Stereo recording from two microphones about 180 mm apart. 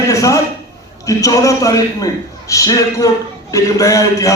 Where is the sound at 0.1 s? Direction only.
20° left (ahead or behind).